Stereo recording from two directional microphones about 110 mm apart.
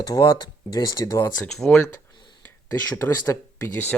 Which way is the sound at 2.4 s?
25° left (ahead or behind).